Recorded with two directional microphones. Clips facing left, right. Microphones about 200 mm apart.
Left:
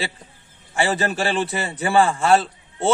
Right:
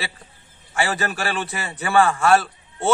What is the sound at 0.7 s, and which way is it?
A man's voice, 25° left (ahead or behind).